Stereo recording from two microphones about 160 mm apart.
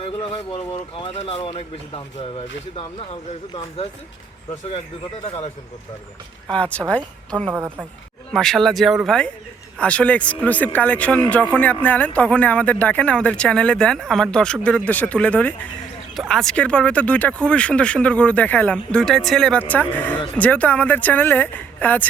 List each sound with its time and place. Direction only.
0.0 s speech: 35° left (ahead or behind)
5.2 s speech: 40° left (ahead or behind)
6.5 s speech: 10° left (ahead or behind)
7.5 s a woman's voice: 10° right (ahead or behind)
8.3 s a man's voice: centre (ahead or behind)